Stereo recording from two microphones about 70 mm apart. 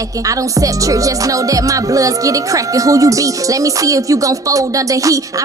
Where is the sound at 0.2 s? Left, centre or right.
Right.